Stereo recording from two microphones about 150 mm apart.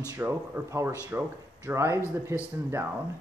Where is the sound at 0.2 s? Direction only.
15° right (ahead or behind).